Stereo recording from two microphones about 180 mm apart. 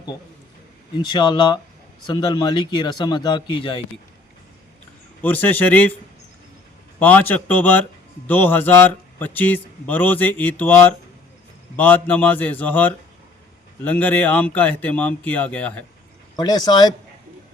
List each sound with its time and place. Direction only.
1.0 s speech: 25° left (ahead or behind)
5.2 s speech: 10° left (ahead or behind)
7.0 s speech: 10° left (ahead or behind)
16.3 s speech: 25° left (ahead or behind)